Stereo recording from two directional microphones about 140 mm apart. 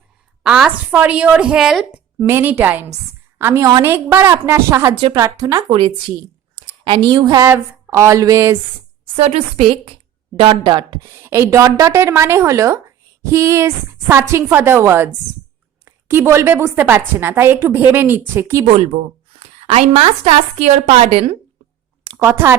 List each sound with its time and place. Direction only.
0.4 s a woman's voice: 5° right (ahead or behind); by 5.6 s 25° right (ahead or behind)
6.8 s a woman's voice: 30° right (ahead or behind)
9.1 s a woman's voice: 45° right (ahead or behind)
11.0 s a woman's voice: 20° right (ahead or behind)
18.9 s speech: 55° right (ahead or behind)
19.4 s a woman's voice: 45° right (ahead or behind)
22.2 s a woman's voice: 15° right (ahead or behind)